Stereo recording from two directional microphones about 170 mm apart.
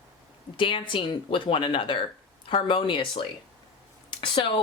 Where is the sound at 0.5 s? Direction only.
30° left (ahead or behind).